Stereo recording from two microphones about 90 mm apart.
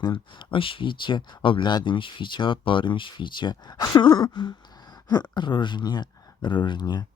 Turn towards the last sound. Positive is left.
turn(degrees=50)  # may be behind; listen again after turning